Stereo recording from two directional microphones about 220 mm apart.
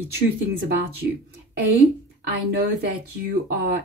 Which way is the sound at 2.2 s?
45° right (ahead or behind).